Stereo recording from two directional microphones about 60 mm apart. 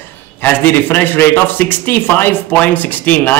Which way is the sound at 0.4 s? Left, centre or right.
Left.